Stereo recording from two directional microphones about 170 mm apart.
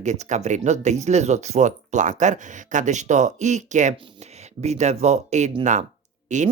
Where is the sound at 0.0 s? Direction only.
45° right (ahead or behind).